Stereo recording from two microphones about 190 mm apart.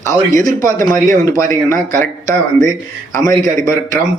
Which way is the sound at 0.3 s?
40° right (ahead or behind).